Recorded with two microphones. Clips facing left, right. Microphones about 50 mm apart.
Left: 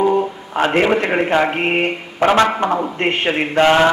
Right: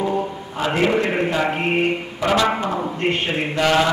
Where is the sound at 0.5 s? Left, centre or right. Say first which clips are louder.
Left 4 dB; left.